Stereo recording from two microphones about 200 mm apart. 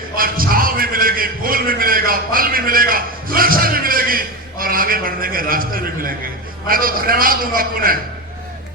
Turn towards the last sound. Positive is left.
turn(degrees=-45)  # may be behind; listen again after turning